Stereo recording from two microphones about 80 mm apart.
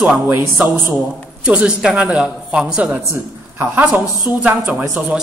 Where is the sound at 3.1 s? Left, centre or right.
Right.